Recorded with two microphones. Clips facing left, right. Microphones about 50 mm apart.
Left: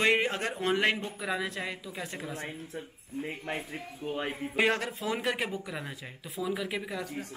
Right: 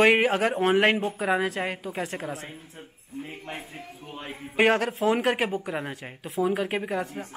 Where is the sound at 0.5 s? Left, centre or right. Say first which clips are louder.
Right 6 dB; right.